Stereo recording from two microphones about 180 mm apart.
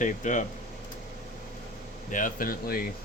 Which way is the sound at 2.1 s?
50° left (ahead or behind).